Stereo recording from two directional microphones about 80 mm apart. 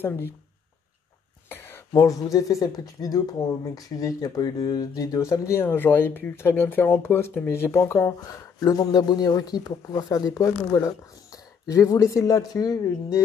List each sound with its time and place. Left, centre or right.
0.0 s speech: left
1.5 s a sound: left
1.9 s speech: left
5.6 s speech: left